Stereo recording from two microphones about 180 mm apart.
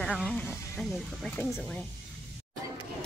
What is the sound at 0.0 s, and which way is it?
Speech, centre (ahead or behind).